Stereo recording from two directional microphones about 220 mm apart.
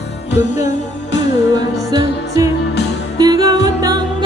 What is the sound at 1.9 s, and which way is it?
Music, 15° right (ahead or behind).